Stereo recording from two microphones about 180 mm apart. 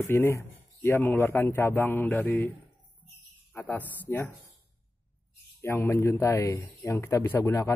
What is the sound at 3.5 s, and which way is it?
Speech, 10° left (ahead or behind).